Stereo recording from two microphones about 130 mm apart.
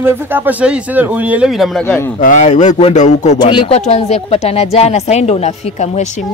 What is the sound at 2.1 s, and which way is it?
Speech, 65° left (ahead or behind).